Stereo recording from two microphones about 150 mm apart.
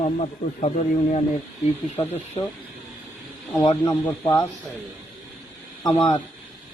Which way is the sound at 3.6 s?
25° left (ahead or behind).